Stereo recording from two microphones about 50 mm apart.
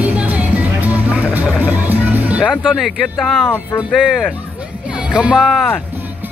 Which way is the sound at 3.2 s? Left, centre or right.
Centre.